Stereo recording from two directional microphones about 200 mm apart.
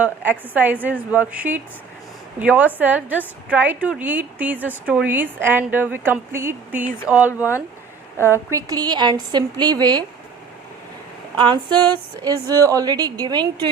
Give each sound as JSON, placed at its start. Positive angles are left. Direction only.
{"t": 0.0, "sound": "a woman's voice", "side_deg": -10}
{"t": 8.3, "sound": "a woman's voice", "side_deg": -15}
{"t": 11.3, "sound": "a woman's voice", "side_deg": -20}